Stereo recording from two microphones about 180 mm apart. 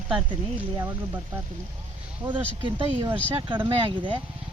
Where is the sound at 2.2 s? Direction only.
25° right (ahead or behind).